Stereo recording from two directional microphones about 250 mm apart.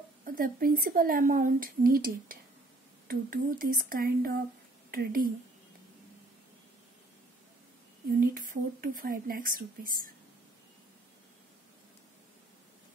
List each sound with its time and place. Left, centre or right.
0.2 s speech: right
8.2 s speech: right